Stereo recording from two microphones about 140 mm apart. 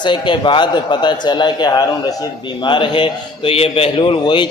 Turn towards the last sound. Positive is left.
turn(degrees=35)  # may be behind; listen again after turning